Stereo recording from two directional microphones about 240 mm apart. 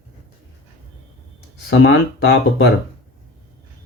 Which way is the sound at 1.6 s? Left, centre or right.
Left.